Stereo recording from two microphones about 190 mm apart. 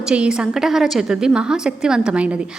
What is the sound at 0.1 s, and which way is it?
A woman's voice, 5° right (ahead or behind).